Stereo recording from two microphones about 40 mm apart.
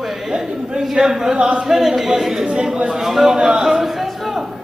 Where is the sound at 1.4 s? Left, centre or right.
Right.